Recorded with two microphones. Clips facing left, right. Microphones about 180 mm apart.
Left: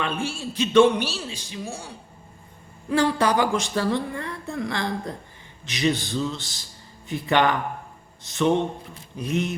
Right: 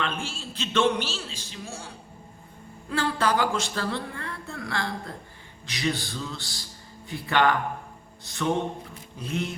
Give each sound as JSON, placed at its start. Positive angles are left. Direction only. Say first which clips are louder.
{"t": 0.0, "sound": "speech", "louder": "left 4 dB", "side_deg": 15}
{"t": 2.9, "sound": "speech", "louder": "left 5 dB", "side_deg": 15}